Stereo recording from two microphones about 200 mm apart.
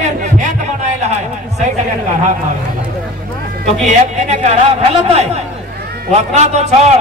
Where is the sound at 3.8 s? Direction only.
35° right (ahead or behind).